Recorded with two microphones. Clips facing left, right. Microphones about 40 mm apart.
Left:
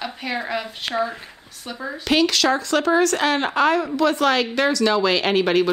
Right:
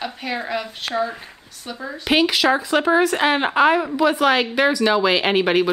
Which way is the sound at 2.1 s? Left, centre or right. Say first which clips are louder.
Right 1 dB; centre.